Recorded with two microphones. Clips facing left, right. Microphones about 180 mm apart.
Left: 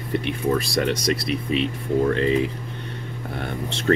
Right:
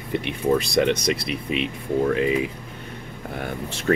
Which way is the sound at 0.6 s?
20° right (ahead or behind).